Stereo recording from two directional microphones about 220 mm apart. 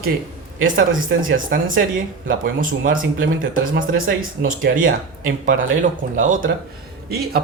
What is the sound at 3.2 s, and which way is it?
Speech, 60° right (ahead or behind).